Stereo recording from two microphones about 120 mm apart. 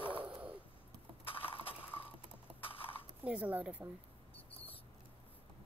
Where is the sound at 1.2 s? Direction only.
50° left (ahead or behind).